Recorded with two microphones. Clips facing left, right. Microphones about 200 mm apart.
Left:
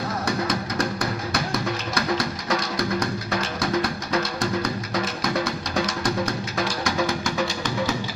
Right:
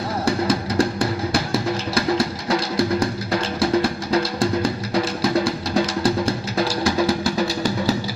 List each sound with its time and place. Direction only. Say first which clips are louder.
0.3 s music: right 7 dB; 30° right (ahead or behind)